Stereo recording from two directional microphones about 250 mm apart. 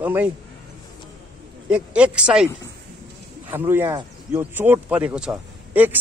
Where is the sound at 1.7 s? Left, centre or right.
Centre.